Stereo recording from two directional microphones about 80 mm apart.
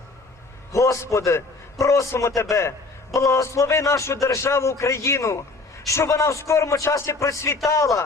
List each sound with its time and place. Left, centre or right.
0.7 s a man's voice: left